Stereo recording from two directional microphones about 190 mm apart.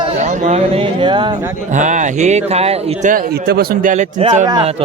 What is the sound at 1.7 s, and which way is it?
A man's voice, 40° right (ahead or behind).